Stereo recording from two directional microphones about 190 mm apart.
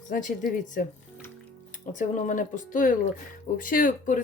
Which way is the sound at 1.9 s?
45° left (ahead or behind).